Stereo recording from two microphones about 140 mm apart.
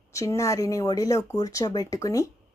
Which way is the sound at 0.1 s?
20° left (ahead or behind).